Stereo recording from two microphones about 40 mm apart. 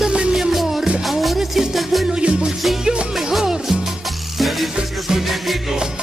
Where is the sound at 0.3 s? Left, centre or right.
Centre.